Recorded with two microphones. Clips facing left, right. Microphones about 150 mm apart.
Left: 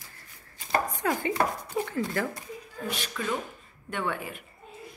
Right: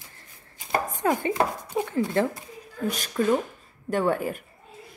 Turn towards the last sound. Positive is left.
turn(degrees=-45)  # may be behind; listen again after turning